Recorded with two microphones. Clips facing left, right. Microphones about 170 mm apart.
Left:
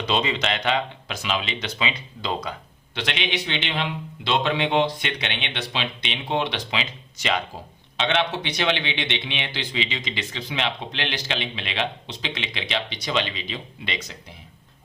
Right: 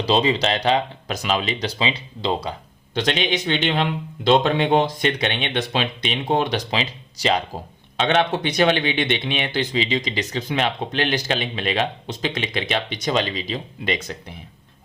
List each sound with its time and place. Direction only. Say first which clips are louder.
0.0 s speech: right 5 dB; 35° right (ahead or behind)
7.9 s speech: right 4 dB; 50° right (ahead or behind)